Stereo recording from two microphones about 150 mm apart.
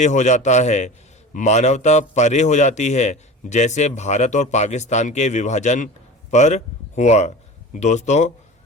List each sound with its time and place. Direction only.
0.0 s a man's voice: 55° left (ahead or behind)